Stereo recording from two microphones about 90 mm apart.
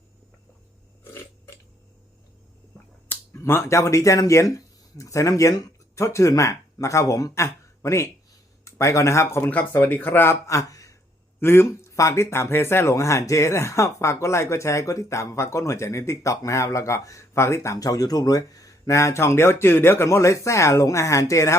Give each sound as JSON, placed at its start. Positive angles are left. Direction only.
{"t": 3.1, "sound": "speech", "side_deg": 30}
{"t": 9.5, "sound": "speech", "side_deg": 20}
{"t": 10.4, "sound": "speech", "side_deg": 40}
{"t": 11.3, "sound": "speech", "side_deg": 25}